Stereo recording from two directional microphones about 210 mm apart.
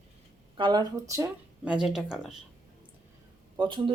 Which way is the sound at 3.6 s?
25° right (ahead or behind).